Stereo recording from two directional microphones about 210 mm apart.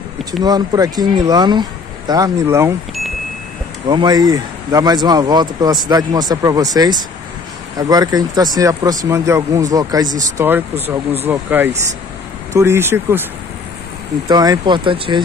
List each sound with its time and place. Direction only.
0.4 s speech: 20° right (ahead or behind)
3.8 s speech: 20° right (ahead or behind)
14.3 s speech: 20° right (ahead or behind)